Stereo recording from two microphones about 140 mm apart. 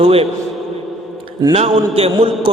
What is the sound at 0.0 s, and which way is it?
Speech, 45° right (ahead or behind).